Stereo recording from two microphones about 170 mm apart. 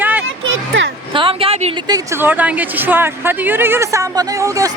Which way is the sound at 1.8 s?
20° right (ahead or behind).